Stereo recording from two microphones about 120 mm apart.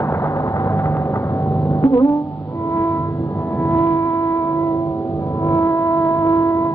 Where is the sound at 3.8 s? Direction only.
25° left (ahead or behind).